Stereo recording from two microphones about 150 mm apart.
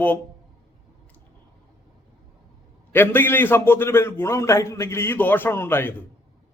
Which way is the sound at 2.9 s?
15° left (ahead or behind).